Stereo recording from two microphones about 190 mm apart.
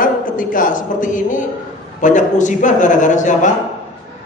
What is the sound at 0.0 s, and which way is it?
A woman's voice, 45° left (ahead or behind).